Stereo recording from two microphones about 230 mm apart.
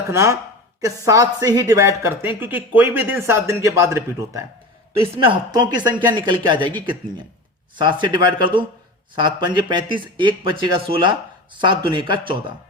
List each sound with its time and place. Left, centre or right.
0.1 s speech: centre
4.9 s a man's voice: right
7.8 s a man's voice: centre